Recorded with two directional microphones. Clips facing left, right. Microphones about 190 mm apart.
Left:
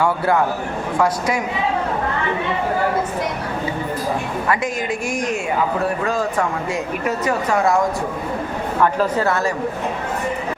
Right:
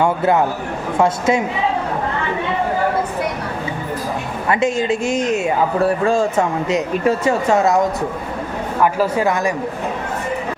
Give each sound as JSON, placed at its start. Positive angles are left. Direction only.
{"t": 0.0, "sound": "speech", "side_deg": -20}
{"t": 4.4, "sound": "speech", "side_deg": -25}
{"t": 8.8, "sound": "a woman's voice", "side_deg": -10}